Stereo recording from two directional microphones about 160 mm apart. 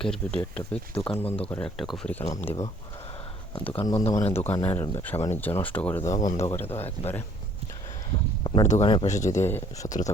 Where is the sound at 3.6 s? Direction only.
35° left (ahead or behind).